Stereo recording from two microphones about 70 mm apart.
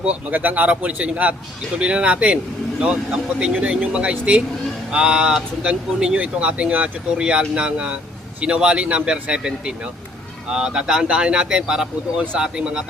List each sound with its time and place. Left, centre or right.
0.0 s speech: right